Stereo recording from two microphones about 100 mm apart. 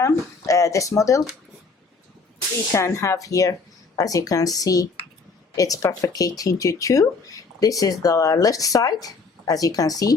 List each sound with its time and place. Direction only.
0.0 s speech: 35° left (ahead or behind)
2.7 s speech: 30° left (ahead or behind)